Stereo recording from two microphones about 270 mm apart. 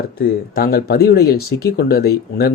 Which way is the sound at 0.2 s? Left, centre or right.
Left.